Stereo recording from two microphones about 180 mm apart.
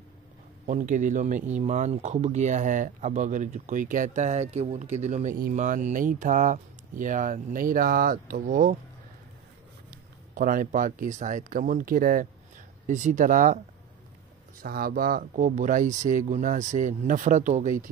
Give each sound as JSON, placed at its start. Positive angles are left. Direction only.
{"t": 0.7, "sound": "speech", "side_deg": -45}
{"t": 10.3, "sound": "speech", "side_deg": -50}
{"t": 14.6, "sound": "speech", "side_deg": -55}